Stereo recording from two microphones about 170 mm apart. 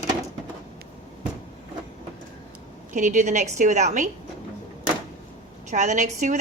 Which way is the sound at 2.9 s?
45° right (ahead or behind).